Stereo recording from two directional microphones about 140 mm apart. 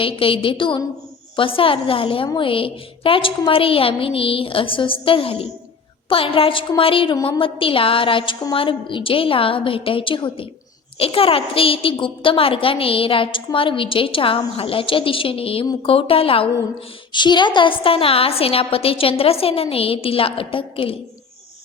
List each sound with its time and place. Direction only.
0.0 s a woman's voice: 40° left (ahead or behind)